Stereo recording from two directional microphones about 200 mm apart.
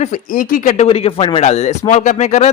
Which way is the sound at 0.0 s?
40° left (ahead or behind).